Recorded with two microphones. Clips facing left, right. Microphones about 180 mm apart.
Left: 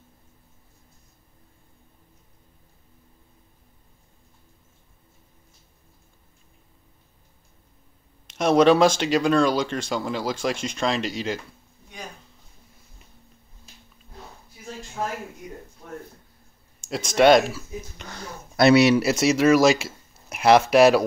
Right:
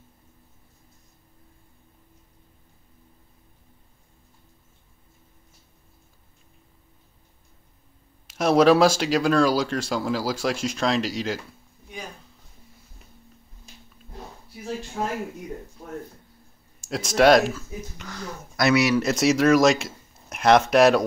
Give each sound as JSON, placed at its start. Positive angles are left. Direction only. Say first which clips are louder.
{"t": 8.3, "sound": "speech", "louder": "even", "side_deg": -5}
{"t": 16.8, "sound": "speech", "louder": "left 1 dB", "side_deg": 0}
{"t": 17.9, "sound": "speech", "louder": "right 2 dB", "side_deg": 25}
{"t": 18.9, "sound": "speech", "louder": "even", "side_deg": 5}